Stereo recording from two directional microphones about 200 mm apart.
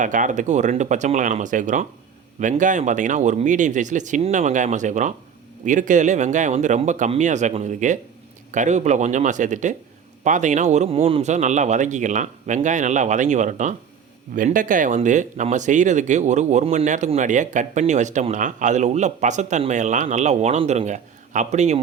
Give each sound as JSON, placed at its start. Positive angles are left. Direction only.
{"t": 0.0, "sound": "speech", "side_deg": -40}